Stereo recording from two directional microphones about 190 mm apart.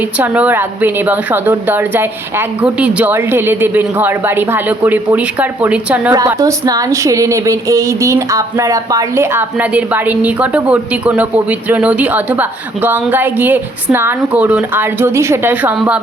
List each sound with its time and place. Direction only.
0.2 s a woman's voice: 10° right (ahead or behind)
6.1 s a woman's voice: 20° right (ahead or behind)